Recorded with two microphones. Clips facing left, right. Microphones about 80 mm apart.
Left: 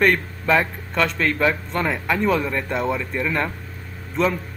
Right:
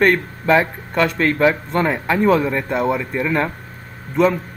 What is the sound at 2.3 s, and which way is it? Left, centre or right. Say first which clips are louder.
Speech: right 5 dB; centre.